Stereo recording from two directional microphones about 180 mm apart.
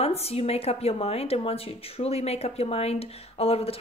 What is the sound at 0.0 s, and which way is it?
Speech, 35° left (ahead or behind).